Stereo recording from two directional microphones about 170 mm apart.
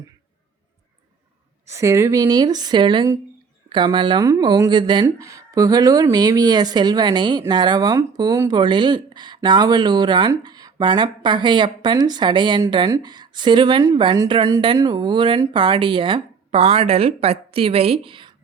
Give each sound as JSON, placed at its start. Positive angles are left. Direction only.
{"t": 1.6, "sound": "speech", "side_deg": -15}